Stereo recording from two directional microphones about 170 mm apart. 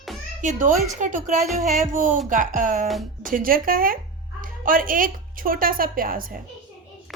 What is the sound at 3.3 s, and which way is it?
A woman's voice, 55° right (ahead or behind).